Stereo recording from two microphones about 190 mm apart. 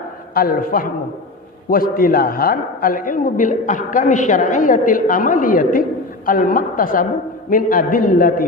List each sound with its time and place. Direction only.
0.3 s a man's voice: 50° left (ahead or behind)